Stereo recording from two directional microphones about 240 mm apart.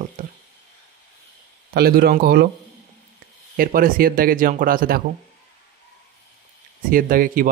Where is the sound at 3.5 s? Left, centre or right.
Right.